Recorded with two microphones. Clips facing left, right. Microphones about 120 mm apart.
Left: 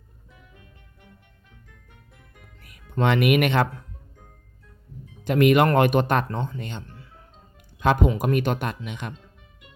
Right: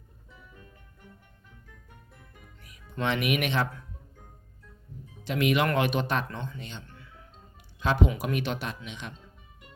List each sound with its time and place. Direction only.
3.0 s speech: 55° left (ahead or behind)
5.2 s speech: 50° left (ahead or behind)
6.2 s speech: 40° left (ahead or behind)
6.8 s music: 35° left (ahead or behind)
7.8 s speech: 55° left (ahead or behind)